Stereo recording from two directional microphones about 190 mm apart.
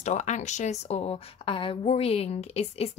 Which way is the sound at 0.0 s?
35° left (ahead or behind).